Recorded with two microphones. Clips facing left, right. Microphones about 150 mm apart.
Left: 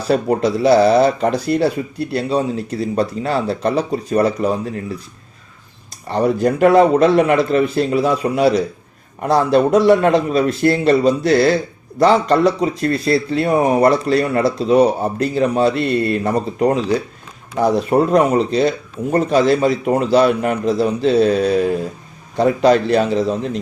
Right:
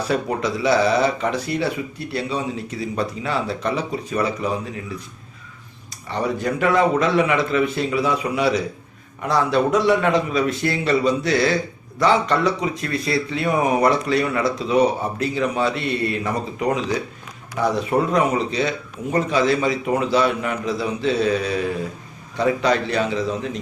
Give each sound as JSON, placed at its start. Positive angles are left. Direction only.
{"t": 0.1, "sound": "a man's voice", "side_deg": 35}
{"t": 6.1, "sound": "a man's voice", "side_deg": 35}